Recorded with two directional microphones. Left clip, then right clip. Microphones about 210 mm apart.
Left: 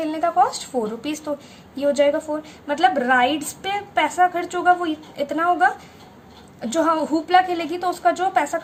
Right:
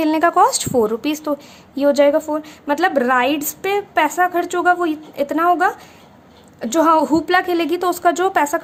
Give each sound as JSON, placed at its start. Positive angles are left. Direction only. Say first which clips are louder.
{"t": 0.0, "sound": "a woman's voice", "louder": "right 5 dB", "side_deg": -40}